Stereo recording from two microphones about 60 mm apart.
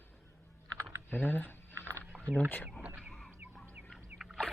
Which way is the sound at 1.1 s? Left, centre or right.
Left.